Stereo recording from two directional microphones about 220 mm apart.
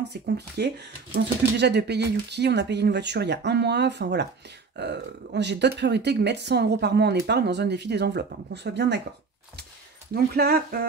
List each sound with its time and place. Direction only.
0.6 s speech: 50° right (ahead or behind)
10.1 s speech: 45° right (ahead or behind)